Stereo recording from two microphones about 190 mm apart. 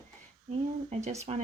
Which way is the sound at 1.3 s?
35° right (ahead or behind).